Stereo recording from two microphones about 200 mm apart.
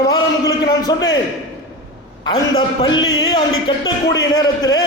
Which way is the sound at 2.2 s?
20° left (ahead or behind).